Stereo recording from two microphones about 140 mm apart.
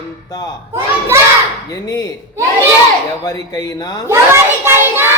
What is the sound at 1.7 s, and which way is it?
Speech, 25° left (ahead or behind).